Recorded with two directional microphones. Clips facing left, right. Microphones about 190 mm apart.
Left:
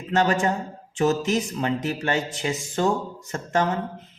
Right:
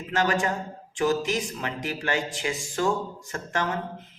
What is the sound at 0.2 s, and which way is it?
Speech, 35° left (ahead or behind).